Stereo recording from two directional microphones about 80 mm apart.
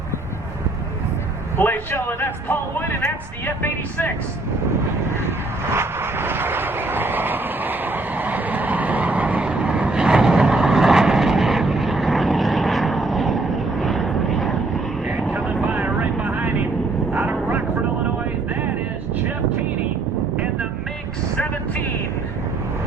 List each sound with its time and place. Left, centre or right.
1.5 s speech: left
5.7 s vehicle: right; by 14.5 s centre
15.3 s vehicle: centre
17.2 s vehicle: centre